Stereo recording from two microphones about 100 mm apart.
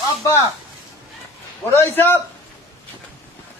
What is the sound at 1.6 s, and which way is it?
Speech, 25° left (ahead or behind).